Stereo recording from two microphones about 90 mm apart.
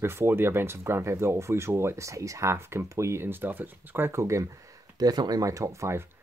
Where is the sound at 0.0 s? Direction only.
25° right (ahead or behind).